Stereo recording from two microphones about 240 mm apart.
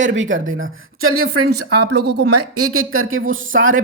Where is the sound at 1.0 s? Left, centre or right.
Right.